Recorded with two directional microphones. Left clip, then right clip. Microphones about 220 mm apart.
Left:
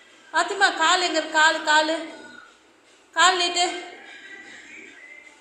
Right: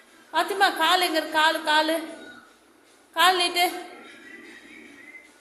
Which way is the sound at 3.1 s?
15° right (ahead or behind).